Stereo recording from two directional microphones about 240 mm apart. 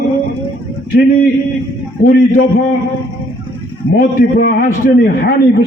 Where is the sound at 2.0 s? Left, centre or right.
Left.